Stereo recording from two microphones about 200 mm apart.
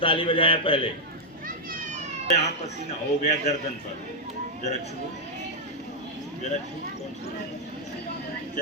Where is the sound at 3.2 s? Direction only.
35° left (ahead or behind).